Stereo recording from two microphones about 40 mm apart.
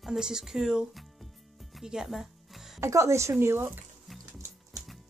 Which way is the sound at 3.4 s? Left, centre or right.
Right.